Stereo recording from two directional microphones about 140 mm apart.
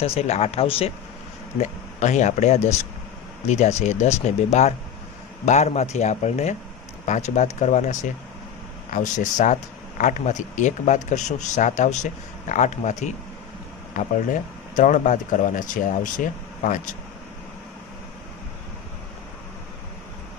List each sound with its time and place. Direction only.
0.0 s speech: 45° left (ahead or behind)
1.6 s speech: 55° left (ahead or behind)
13.9 s speech: 70° left (ahead or behind)